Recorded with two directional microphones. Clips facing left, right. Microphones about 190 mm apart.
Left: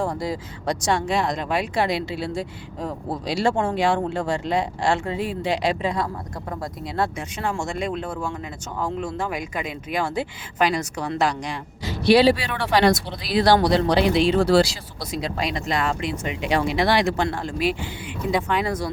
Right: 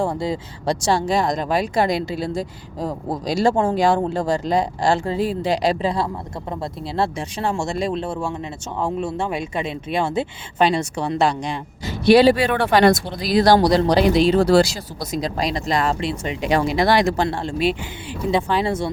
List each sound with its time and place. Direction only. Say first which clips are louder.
0.0 s speech: right 3 dB; 25° right (ahead or behind)
11.9 s speech: right 3 dB; 50° right (ahead or behind)
17.2 s speech: right 3 dB; 25° right (ahead or behind)